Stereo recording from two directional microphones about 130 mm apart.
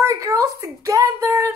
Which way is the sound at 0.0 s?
20° right (ahead or behind).